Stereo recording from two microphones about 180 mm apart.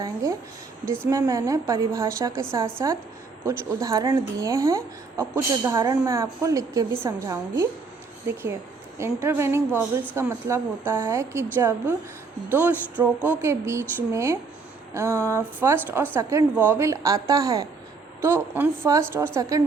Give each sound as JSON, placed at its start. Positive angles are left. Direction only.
{"t": 0.0, "sound": "a woman's voice", "side_deg": -20}